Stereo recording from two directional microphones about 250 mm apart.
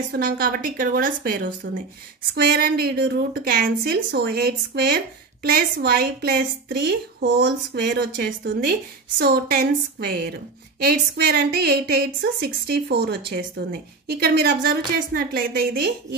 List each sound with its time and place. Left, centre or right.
0.1 s a woman's voice: right